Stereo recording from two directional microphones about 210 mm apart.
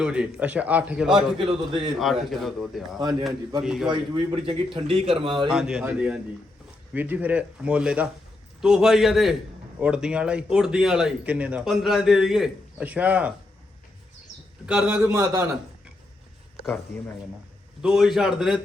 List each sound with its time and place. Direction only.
0.0 s a man's voice: 5° right (ahead or behind)
1.4 s a man's voice: 25° right (ahead or behind)
2.0 s speech: centre (ahead or behind)
3.0 s a man's voice: 20° right (ahead or behind)
3.6 s speech: 5° right (ahead or behind)
3.8 s a man's voice: 25° right (ahead or behind)
5.5 s a man's voice: 5° right (ahead or behind)
14.7 s a man's voice: 5° right (ahead or behind)
16.6 s speech: centre (ahead or behind)